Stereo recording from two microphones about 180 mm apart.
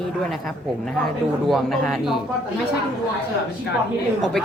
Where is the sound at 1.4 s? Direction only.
Centre (ahead or behind).